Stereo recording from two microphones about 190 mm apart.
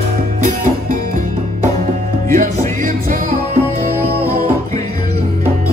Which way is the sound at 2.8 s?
45° right (ahead or behind).